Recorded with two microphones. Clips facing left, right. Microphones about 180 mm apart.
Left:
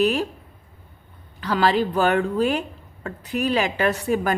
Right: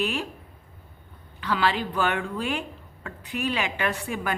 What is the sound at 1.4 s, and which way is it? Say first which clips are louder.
Speech: left 5 dB; 40° left (ahead or behind).